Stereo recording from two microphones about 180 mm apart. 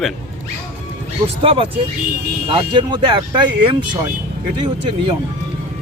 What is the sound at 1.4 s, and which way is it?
A man's voice, 30° right (ahead or behind).